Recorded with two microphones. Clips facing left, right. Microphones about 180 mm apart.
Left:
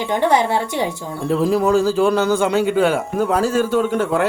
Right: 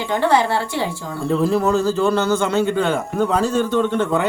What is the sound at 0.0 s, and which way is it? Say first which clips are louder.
A man's voice: left 1 dB; 20° left (ahead or behind).